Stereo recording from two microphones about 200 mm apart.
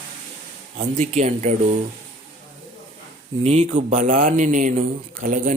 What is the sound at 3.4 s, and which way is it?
Speech, 35° right (ahead or behind).